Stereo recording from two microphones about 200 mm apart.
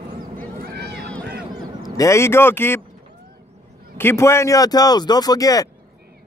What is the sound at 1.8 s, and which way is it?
Speech, 15° left (ahead or behind).